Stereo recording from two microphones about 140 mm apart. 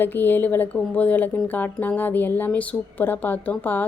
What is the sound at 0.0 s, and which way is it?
Speech, 15° left (ahead or behind).